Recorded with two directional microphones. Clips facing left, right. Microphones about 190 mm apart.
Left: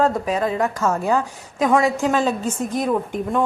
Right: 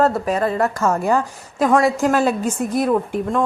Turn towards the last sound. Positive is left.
turn(degrees=-5)  # may be behind; listen again after turning